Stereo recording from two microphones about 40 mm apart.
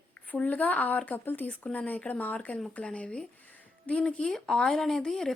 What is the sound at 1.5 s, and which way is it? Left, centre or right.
A woman's voice, left.